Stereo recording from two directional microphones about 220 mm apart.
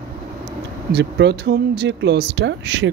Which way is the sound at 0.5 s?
50° right (ahead or behind).